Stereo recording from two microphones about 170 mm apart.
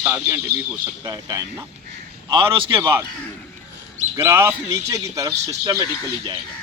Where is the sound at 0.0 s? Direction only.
15° right (ahead or behind).